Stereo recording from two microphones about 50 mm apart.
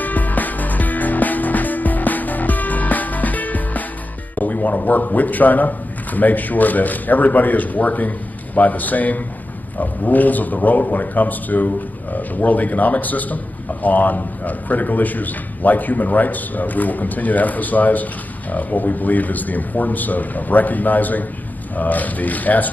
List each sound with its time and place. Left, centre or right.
0.0 s music: left
4.4 s a man's voice: left